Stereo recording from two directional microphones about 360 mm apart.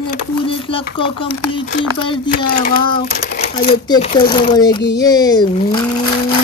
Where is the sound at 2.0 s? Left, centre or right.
Left.